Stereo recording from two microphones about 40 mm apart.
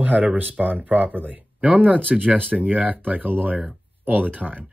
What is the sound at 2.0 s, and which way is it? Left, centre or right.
Speech, right.